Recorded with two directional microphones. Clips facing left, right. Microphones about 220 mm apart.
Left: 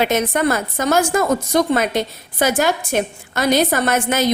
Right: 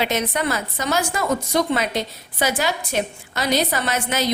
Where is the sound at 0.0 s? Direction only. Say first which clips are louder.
Left 5 dB; 50° left (ahead or behind).